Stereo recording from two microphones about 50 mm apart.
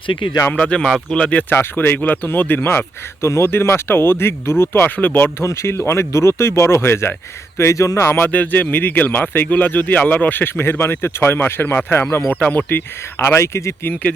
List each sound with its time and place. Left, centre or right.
0.5 s speech: centre
1.5 s speech: left
2.6 s speech: left
3.5 s speech: left
4.9 s speech: left
5.4 s speech: left
7.6 s speech: left
8.1 s speech: left
10.6 s speech: left
12.4 s speech: left
12.7 s speech: left
13.4 s speech: left